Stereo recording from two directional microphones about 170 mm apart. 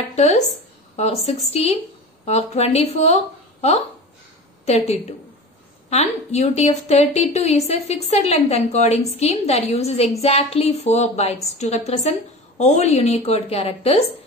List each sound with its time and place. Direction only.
0.9 s a woman's voice: 40° left (ahead or behind)
4.6 s a woman's voice: 40° left (ahead or behind)